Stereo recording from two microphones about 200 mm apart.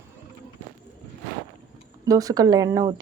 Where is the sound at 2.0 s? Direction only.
15° right (ahead or behind).